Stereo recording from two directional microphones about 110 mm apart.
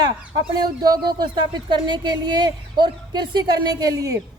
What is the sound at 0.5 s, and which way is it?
Speech, 40° right (ahead or behind).